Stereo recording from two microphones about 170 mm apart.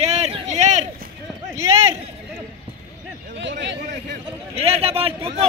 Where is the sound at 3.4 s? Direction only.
90° right.